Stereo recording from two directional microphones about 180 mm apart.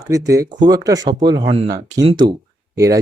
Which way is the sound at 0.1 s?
20° right (ahead or behind).